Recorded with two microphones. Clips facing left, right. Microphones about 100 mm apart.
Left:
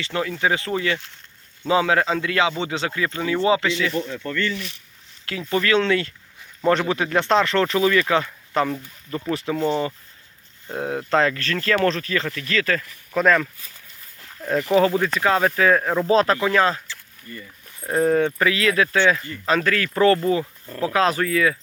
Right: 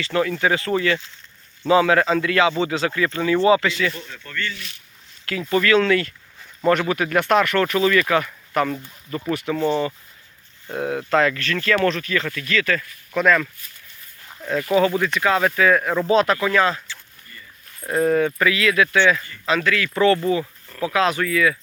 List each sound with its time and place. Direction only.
0.0 s speech: 20° left (ahead or behind)
5.5 s speech: 25° left (ahead or behind)
14.8 s speech: 35° left (ahead or behind)